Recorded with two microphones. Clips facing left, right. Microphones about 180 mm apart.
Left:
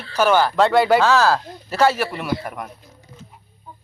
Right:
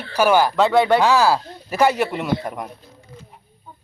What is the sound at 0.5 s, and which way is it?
Speech, centre (ahead or behind).